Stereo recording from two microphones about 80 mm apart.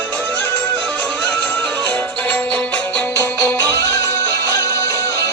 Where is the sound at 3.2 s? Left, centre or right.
Left.